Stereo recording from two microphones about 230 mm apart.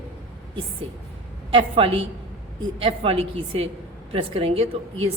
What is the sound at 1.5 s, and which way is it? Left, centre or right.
A woman's voice, right.